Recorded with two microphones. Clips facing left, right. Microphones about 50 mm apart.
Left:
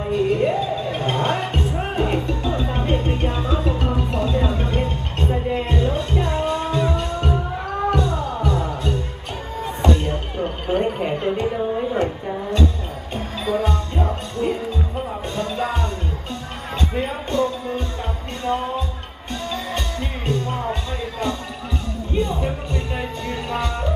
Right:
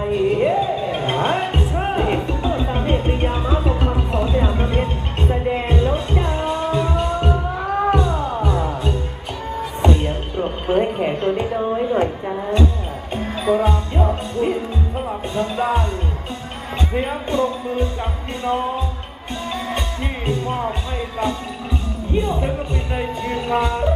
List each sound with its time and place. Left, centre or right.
0.1 s music: centre
10.7 s a sound: centre
13.4 s music: centre
16.9 s music: centre
19.7 s music: centre